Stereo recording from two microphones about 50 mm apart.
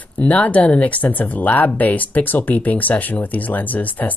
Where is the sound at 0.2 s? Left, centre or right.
Left.